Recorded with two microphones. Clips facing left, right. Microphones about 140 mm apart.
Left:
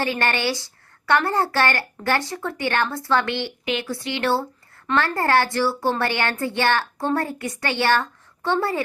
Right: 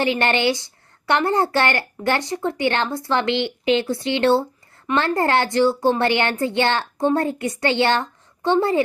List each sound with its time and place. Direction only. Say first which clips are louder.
0.0 s speech: right 4 dB; 20° right (ahead or behind)